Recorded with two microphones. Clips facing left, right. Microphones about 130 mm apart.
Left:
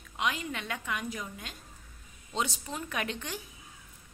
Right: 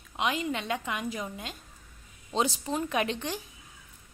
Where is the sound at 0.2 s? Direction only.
25° right (ahead or behind).